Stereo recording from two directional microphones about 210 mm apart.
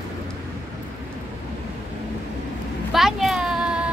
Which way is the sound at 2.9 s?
Centre (ahead or behind).